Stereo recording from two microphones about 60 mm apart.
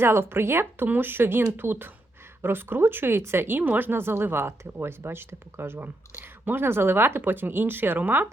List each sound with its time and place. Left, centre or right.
0.0 s speech: right